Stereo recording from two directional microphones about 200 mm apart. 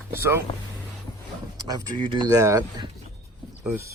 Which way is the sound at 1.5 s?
20° right (ahead or behind).